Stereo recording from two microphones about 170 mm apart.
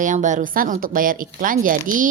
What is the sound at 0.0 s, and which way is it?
A woman's voice, 45° right (ahead or behind).